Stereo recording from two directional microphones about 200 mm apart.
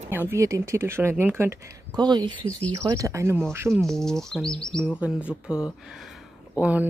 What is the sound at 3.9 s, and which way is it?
Speech, centre (ahead or behind).